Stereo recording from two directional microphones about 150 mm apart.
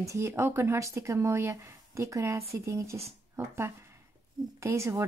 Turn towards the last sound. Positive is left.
turn(degrees=-20)  # may be behind; listen again after turning